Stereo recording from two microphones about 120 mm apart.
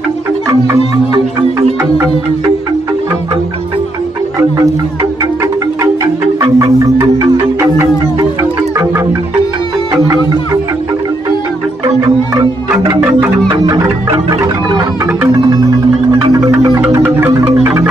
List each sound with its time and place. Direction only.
6.4 s music: 25° right (ahead or behind)
12.0 s music: 30° right (ahead or behind)
16.8 s music: 20° right (ahead or behind)